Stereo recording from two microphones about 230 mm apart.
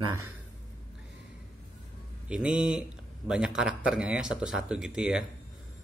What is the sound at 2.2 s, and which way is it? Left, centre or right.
A man's voice, centre.